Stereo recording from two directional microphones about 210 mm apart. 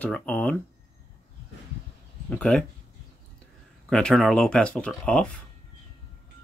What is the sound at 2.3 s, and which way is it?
Speech, 5° left (ahead or behind).